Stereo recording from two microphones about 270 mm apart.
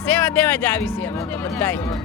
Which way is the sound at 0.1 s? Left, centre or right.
Centre.